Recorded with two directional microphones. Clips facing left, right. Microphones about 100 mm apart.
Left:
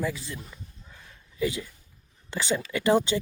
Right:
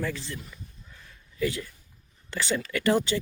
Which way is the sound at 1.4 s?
15° left (ahead or behind).